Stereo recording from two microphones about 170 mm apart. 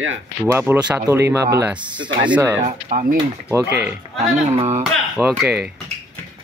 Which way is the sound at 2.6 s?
45° right (ahead or behind).